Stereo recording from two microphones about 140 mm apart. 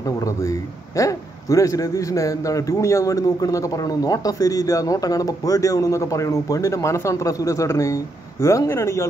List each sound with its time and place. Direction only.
0.4 s a man's voice: 20° left (ahead or behind)